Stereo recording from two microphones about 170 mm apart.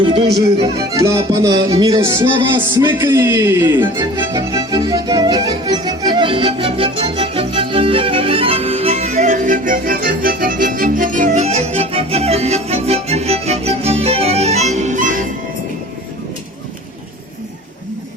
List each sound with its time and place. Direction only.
0.0 s music: 30° right (ahead or behind)
0.9 s music: 15° right (ahead or behind); by 15.3 s 50° right (ahead or behind)